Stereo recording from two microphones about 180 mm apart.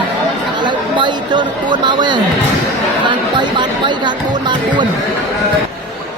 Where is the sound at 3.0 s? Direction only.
25° right (ahead or behind).